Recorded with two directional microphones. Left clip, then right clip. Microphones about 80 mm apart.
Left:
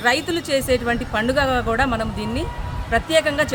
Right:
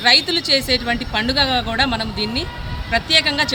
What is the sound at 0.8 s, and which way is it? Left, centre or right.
A woman's voice, left.